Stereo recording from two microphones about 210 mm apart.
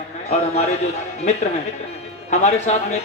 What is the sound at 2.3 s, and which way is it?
Speech, 35° left (ahead or behind).